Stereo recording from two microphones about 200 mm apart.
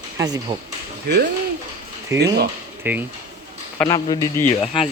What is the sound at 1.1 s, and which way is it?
Speech, 55° right (ahead or behind).